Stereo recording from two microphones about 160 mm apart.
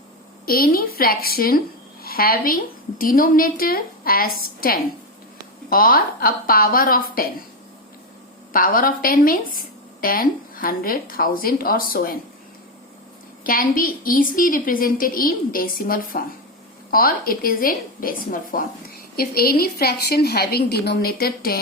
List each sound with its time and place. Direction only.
0.4 s a woman's voice: 70° left (ahead or behind)
8.5 s a woman's voice: 60° left (ahead or behind)
13.4 s a woman's voice: 60° left (ahead or behind)